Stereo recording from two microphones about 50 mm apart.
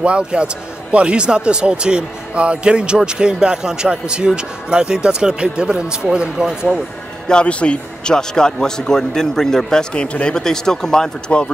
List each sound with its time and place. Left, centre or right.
0.0 s a man's voice: right
7.2 s a man's voice: left